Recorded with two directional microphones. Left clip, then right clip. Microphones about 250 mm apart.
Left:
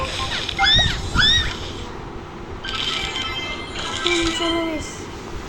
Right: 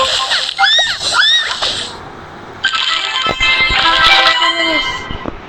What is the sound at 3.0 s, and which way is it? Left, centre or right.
Music, right.